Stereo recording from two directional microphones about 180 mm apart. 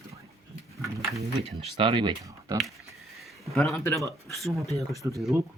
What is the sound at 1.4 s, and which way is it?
Speech, 30° right (ahead or behind).